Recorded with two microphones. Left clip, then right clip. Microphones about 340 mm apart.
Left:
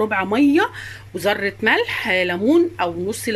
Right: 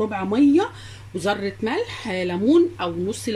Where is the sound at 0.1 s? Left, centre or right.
Left.